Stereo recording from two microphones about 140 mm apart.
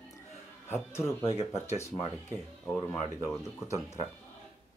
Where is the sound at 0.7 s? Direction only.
20° left (ahead or behind).